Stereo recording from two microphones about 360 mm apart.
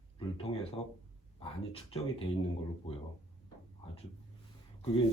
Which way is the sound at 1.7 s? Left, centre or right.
Centre.